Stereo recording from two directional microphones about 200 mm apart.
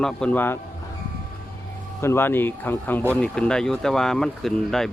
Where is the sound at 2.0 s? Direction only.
10° left (ahead or behind).